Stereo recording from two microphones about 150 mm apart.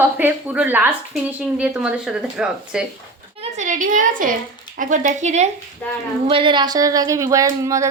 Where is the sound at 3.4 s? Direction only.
55° right (ahead or behind).